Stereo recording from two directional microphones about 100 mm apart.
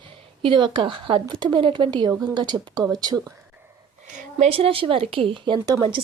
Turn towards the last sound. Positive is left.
turn(degrees=-45)  # may be behind; listen again after turning